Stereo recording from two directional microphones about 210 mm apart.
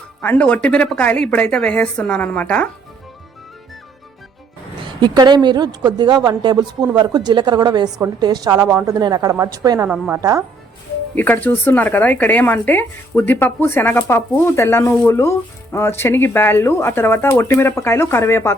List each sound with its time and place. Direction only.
0.2 s a woman's voice: 5° left (ahead or behind)
4.9 s a woman's voice: 20° right (ahead or behind)
11.1 s speech: 10° left (ahead or behind)